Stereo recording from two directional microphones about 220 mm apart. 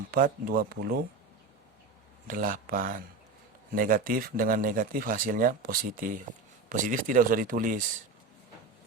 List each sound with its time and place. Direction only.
0.1 s speech: 40° right (ahead or behind)
2.2 s speech: 40° right (ahead or behind)